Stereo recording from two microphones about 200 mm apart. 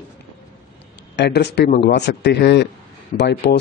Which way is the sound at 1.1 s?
55° left (ahead or behind).